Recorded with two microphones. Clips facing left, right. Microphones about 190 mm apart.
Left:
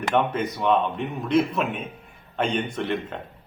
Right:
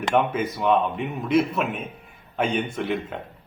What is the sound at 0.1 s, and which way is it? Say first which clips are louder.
A man's voice: right 1 dB; 5° right (ahead or behind).